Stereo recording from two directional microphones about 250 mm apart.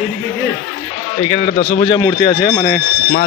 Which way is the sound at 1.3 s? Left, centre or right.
Left.